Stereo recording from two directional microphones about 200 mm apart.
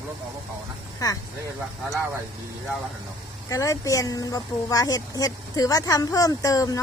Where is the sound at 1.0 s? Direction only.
20° left (ahead or behind).